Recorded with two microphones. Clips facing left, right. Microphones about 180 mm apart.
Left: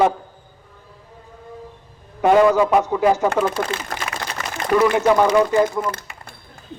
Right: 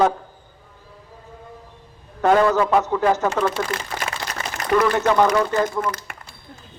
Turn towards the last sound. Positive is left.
turn(degrees=-55)  # may be behind; listen again after turning